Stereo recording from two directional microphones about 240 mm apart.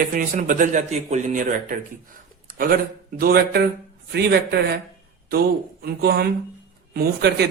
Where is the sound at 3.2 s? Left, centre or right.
Right.